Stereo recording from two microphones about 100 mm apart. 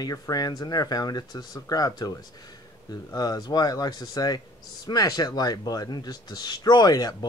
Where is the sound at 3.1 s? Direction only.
40° left (ahead or behind).